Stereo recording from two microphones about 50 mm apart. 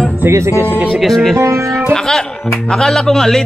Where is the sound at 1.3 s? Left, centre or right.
Right.